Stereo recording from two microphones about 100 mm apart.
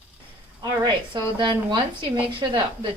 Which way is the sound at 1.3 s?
50° right (ahead or behind).